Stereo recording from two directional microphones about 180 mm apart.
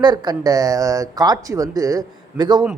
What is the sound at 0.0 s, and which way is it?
Speech, 25° right (ahead or behind).